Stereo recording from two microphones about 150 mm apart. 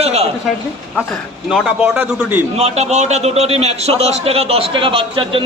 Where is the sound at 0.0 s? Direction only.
45° right (ahead or behind).